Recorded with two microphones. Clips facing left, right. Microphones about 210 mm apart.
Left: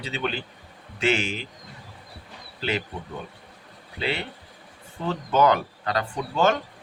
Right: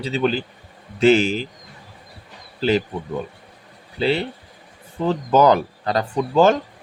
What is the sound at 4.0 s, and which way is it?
Speech, 35° right (ahead or behind).